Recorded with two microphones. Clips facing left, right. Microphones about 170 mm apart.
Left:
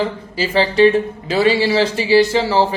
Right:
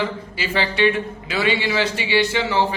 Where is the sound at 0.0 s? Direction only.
35° left (ahead or behind).